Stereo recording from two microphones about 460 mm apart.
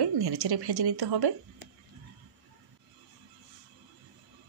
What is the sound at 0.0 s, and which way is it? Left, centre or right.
Speech, right.